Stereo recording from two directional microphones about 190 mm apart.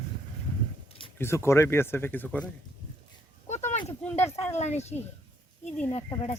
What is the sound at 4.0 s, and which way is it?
Speech, 10° left (ahead or behind).